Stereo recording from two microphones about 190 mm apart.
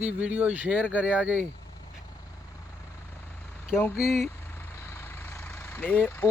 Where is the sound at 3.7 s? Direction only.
5° right (ahead or behind).